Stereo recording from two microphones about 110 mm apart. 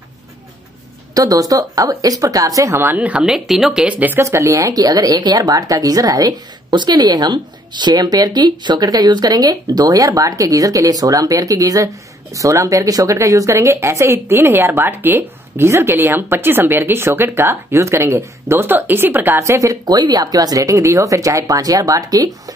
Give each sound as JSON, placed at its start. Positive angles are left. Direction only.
{"t": 1.1, "sound": "speech", "side_deg": -35}
{"t": 4.0, "sound": "speech", "side_deg": -20}